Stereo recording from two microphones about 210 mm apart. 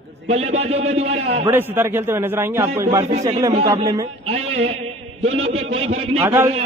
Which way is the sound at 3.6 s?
15° right (ahead or behind).